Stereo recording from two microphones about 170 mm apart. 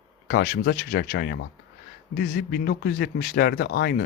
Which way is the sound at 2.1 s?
60° left (ahead or behind).